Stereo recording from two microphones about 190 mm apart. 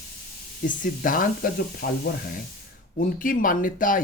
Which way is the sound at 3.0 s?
45° left (ahead or behind).